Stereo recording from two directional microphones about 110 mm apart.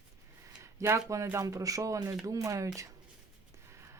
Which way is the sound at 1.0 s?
30° right (ahead or behind).